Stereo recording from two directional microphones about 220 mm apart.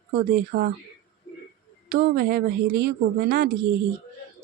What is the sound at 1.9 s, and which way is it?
Speech, 45° right (ahead or behind).